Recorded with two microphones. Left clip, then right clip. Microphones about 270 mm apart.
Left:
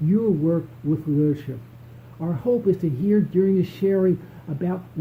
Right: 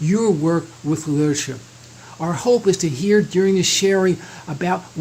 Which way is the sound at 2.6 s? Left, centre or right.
Centre.